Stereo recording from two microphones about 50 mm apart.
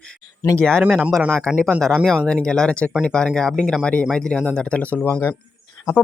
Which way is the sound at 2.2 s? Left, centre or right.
Centre.